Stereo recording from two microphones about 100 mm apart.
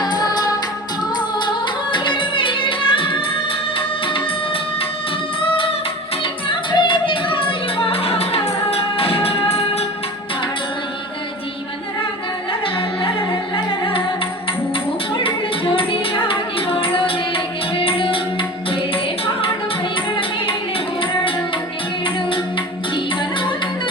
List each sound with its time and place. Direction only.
0.0 s music: 45° left (ahead or behind); by 4.2 s 60° left (ahead or behind)
6.5 s music: 55° left (ahead or behind); by 9.8 s 85° left
15.1 s music: 60° left (ahead or behind)